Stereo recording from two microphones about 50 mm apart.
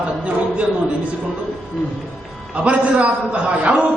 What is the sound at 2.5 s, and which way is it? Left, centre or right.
A man's voice, right.